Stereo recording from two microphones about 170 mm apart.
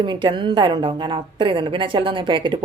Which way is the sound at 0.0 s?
25° right (ahead or behind).